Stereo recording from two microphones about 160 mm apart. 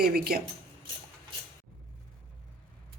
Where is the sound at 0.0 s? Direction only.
75° right (ahead or behind).